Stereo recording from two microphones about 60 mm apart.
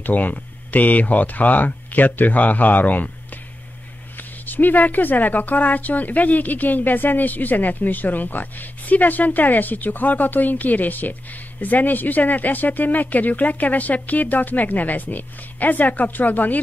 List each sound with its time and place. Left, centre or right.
0.0 s speech: left
4.5 s speech: left